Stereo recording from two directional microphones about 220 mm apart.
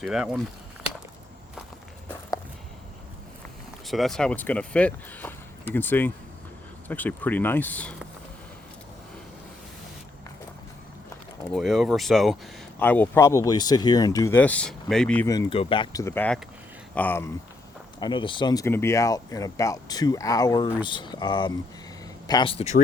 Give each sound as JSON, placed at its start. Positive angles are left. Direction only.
{"t": 0.0, "sound": "speech", "side_deg": 0}
{"t": 3.8, "sound": "speech", "side_deg": 0}
{"t": 11.5, "sound": "speech", "side_deg": 0}
{"t": 18.0, "sound": "speech", "side_deg": 20}